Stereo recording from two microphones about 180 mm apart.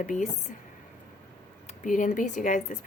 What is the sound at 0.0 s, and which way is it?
Speech, 45° left (ahead or behind).